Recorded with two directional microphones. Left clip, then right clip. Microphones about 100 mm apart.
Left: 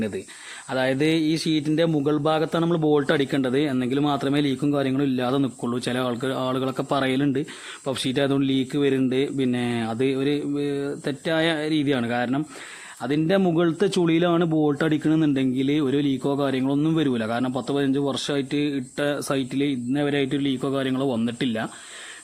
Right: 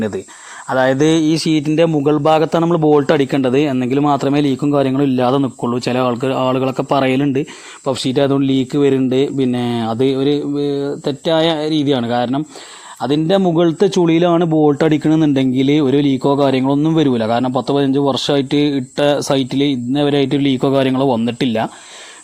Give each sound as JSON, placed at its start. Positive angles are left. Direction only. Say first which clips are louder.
{"t": 0.7, "sound": "speech", "louder": "right 9 dB", "side_deg": -30}
{"t": 2.6, "sound": "speech", "louder": "right 7 dB", "side_deg": -35}
{"t": 5.4, "sound": "speech", "louder": "right 8 dB", "side_deg": -20}
{"t": 5.8, "sound": "speech", "louder": "right 9 dB", "side_deg": -35}
{"t": 13.0, "sound": "speech", "louder": "right 7 dB", "side_deg": -40}
{"t": 16.7, "sound": "speech", "louder": "right 7 dB", "side_deg": -35}
{"t": 17.0, "sound": "a man's voice", "louder": "right 9 dB", "side_deg": -45}